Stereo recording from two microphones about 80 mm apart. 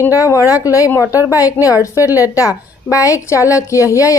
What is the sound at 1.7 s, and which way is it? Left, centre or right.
A woman's voice, left.